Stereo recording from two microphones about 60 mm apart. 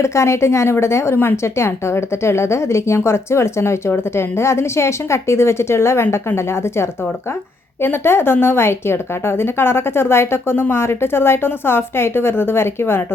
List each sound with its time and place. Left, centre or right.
0.0 s a woman's voice: left